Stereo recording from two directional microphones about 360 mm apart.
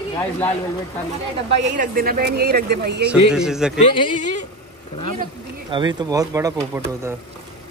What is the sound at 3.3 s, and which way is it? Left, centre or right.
Speech, centre.